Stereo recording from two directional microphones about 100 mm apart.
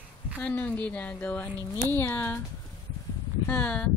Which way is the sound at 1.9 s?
20° left (ahead or behind).